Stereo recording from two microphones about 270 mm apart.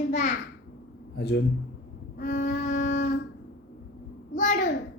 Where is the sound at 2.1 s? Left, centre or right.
Left.